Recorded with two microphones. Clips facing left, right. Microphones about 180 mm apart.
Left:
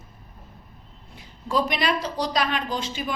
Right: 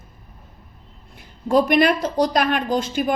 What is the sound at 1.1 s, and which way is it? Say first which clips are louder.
A woman's voice: right 7 dB; 55° right (ahead or behind).